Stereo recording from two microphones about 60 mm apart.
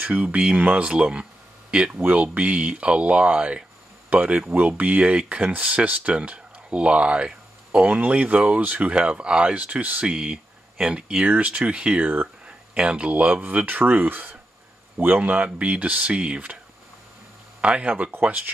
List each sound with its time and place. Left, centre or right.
0.0 s speech: right
17.6 s speech: right